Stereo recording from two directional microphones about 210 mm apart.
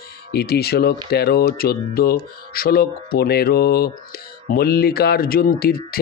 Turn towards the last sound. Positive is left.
turn(degrees=45)  # may be behind; listen again after turning